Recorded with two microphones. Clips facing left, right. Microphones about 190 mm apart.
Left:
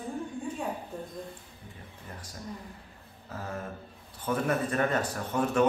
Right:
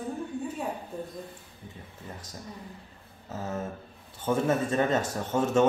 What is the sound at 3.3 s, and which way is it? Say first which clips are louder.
A man's voice: right 4 dB; 25° right (ahead or behind).